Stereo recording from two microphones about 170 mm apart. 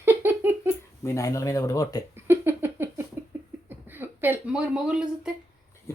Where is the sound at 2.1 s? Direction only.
15° right (ahead or behind).